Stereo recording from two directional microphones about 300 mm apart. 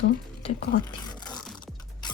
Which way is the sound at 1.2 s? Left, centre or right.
Centre.